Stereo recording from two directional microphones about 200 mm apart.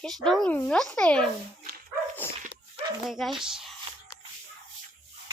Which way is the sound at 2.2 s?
10° left (ahead or behind).